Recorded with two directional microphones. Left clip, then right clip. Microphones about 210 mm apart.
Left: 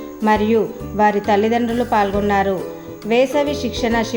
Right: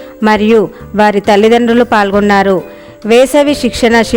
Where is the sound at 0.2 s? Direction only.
50° right (ahead or behind).